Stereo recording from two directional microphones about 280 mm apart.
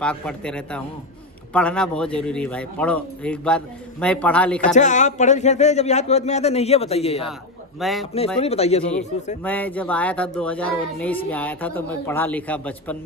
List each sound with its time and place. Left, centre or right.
0.0 s speech: centre
4.7 s speech: left
7.8 s speech: centre
8.4 s speech: left
9.4 s speech: centre